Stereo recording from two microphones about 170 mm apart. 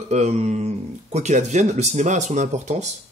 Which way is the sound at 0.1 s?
40° right (ahead or behind).